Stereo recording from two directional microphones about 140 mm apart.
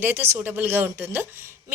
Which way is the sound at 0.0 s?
15° right (ahead or behind).